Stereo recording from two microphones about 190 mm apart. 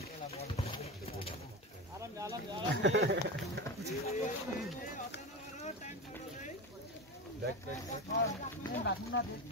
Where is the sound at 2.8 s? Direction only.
90° right.